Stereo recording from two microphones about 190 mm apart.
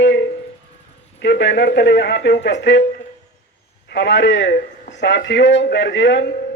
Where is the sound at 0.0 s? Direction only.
65° left (ahead or behind).